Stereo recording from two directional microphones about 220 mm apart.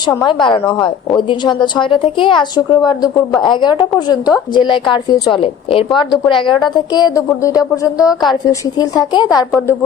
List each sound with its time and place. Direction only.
0.0 s a woman's voice: 15° left (ahead or behind)